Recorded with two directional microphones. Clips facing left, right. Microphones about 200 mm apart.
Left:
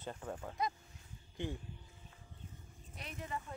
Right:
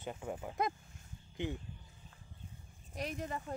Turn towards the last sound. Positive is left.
turn(degrees=-40)  # may be behind; listen again after turning